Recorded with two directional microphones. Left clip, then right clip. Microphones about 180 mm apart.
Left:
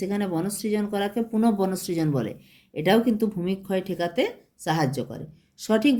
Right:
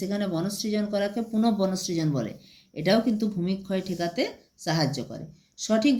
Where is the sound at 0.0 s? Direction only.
50° left (ahead or behind).